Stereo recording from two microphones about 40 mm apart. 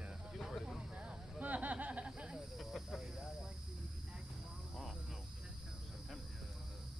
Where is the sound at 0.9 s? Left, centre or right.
Right.